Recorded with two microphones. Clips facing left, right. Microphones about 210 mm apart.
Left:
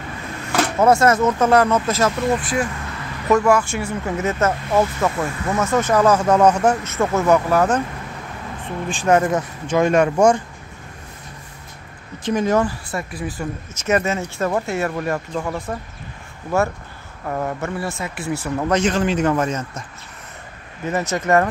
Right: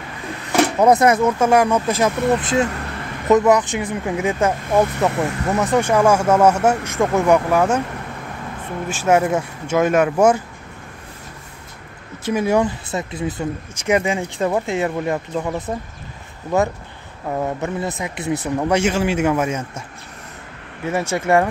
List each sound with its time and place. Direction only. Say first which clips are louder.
0.5 s speech: right 2 dB; 15° right (ahead or behind)
8.8 s speech: even; 10° right (ahead or behind)
12.3 s speech: right 1 dB; 10° right (ahead or behind)
12.6 s speech: right 2 dB; 20° right (ahead or behind)
21.1 s speech: right 1 dB; 10° right (ahead or behind)